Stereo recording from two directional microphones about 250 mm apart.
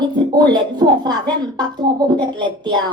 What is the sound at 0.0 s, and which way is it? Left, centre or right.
A woman's voice, centre.